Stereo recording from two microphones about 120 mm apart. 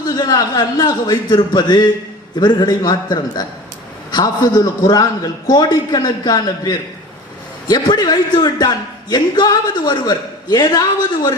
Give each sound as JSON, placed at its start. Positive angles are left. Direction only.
{"t": 0.0, "sound": "a man's voice", "side_deg": 35}